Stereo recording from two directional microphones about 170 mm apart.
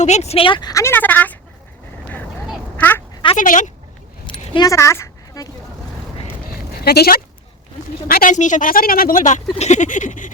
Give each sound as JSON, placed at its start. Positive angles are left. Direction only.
{"t": 0.0, "sound": "speech", "side_deg": 40}
{"t": 2.5, "sound": "quack", "side_deg": 10}
{"t": 3.3, "sound": "a sound", "side_deg": 50}
{"t": 4.3, "sound": "keys jangling", "side_deg": 25}
{"t": 6.5, "sound": "sheep", "side_deg": 65}
{"t": 8.0, "sound": "speech", "side_deg": 55}
{"t": 9.6, "sound": "a sound", "side_deg": 45}